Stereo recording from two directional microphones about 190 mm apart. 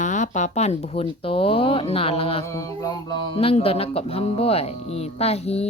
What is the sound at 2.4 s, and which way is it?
Mantra, 15° left (ahead or behind).